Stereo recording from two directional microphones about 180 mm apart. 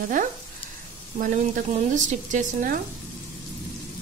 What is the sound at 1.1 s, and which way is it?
Speech, 50° right (ahead or behind).